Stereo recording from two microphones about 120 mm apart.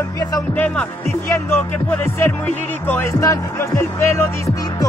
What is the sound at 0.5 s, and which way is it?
Speech, 15° left (ahead or behind).